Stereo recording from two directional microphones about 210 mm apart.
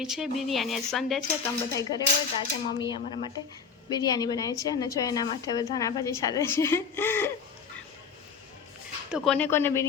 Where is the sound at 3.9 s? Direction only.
20° left (ahead or behind).